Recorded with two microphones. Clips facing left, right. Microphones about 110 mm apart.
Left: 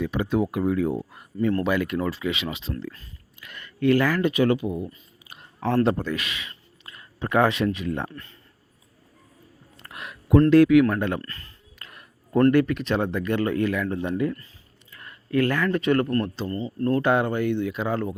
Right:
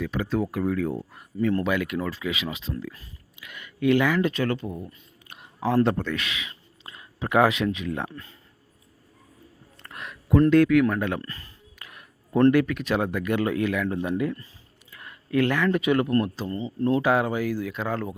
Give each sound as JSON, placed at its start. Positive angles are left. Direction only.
{"t": 0.0, "sound": "speech", "side_deg": 5}
{"t": 4.3, "sound": "speech", "side_deg": 15}
{"t": 9.8, "sound": "a sound", "side_deg": 5}
{"t": 10.5, "sound": "speech", "side_deg": 5}
{"t": 11.2, "sound": "speech", "side_deg": -15}
{"t": 11.8, "sound": "a sound", "side_deg": 0}
{"t": 12.5, "sound": "speech", "side_deg": -5}
{"t": 16.6, "sound": "speech", "side_deg": -20}
{"t": 17.0, "sound": "speech", "side_deg": -5}